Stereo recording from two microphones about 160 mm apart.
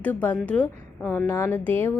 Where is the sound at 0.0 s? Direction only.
10° left (ahead or behind).